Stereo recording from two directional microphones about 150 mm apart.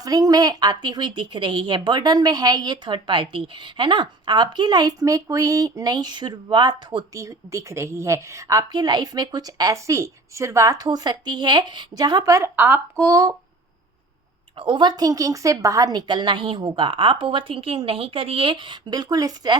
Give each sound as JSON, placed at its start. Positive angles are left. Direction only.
{"t": 0.0, "sound": "speech", "side_deg": -25}
{"t": 14.5, "sound": "a woman's voice", "side_deg": -35}